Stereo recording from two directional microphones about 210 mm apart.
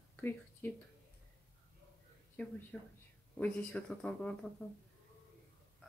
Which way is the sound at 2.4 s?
5° left (ahead or behind).